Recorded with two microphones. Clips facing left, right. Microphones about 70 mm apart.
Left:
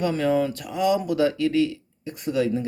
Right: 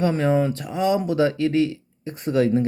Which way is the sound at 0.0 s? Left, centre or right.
Right.